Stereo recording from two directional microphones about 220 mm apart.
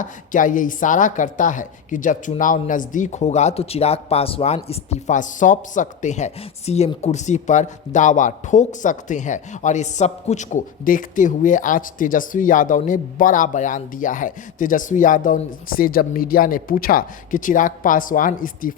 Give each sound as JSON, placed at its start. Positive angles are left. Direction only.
{"t": 0.0, "sound": "a woman's voice", "side_deg": 35}